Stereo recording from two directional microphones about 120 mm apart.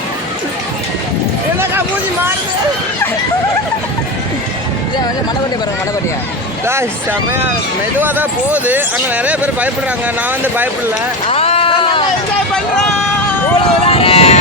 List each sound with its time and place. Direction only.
6.7 s speech: 20° right (ahead or behind)
11.3 s a sound: 55° left (ahead or behind)
13.6 s run: 55° left (ahead or behind)